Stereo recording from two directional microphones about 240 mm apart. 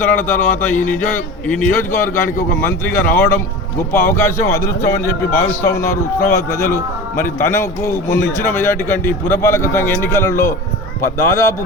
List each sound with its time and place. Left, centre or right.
0.0 s a man's voice: centre